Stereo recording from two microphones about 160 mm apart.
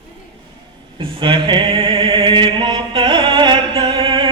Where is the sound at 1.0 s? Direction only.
30° right (ahead or behind).